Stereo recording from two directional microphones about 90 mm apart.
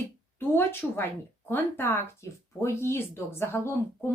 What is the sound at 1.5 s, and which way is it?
Speech, 25° left (ahead or behind).